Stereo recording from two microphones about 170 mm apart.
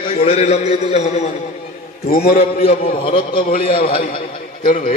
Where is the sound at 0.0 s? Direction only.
35° left (ahead or behind).